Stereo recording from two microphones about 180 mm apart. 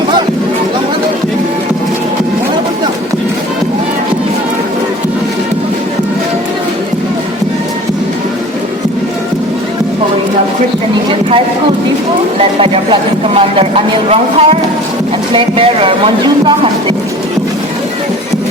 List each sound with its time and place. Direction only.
12.4 s speech: 30° right (ahead or behind)